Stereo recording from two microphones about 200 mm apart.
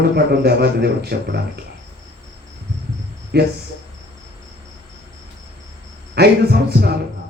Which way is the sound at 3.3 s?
55° right (ahead or behind).